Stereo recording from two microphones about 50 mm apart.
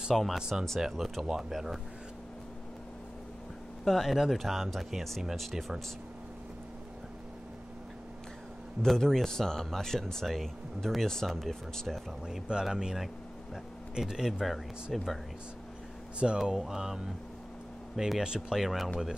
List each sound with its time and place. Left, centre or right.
0.1 s speech: centre
3.8 s speech: centre
8.8 s speech: centre
12.3 s speech: centre
14.4 s speech: centre
16.4 s speech: centre
18.2 s speech: centre
18.6 s speech: centre